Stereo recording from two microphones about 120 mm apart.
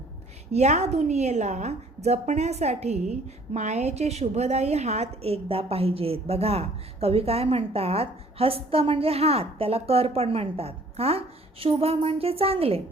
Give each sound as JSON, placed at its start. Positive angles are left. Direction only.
{"t": 0.5, "sound": "a woman's voice", "side_deg": -70}